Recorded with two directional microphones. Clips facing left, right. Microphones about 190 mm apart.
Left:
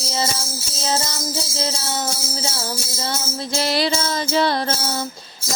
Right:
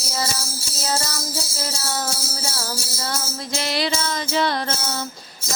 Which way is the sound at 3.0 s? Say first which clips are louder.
Left 3 dB; 30° left (ahead or behind).